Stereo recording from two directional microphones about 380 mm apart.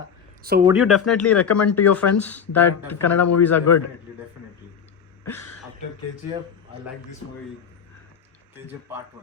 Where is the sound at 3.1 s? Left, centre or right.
Left.